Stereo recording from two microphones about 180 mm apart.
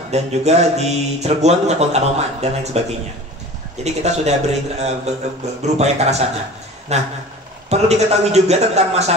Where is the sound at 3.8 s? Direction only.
40° right (ahead or behind).